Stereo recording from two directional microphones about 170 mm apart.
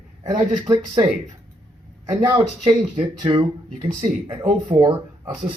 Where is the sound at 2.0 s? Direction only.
25° right (ahead or behind).